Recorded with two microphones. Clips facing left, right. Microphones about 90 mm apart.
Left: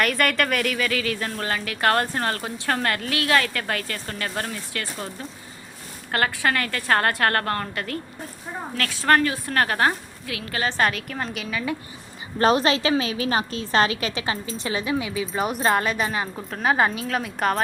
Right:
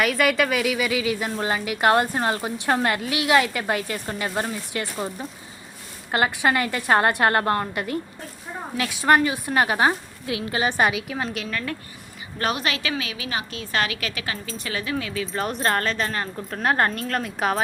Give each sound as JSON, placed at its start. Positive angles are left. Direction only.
{"t": 0.0, "sound": "speech", "side_deg": -5}
{"t": 12.4, "sound": "a woman's voice", "side_deg": 35}